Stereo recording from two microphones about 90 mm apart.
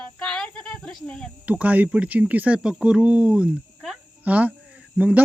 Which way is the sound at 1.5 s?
15° right (ahead or behind).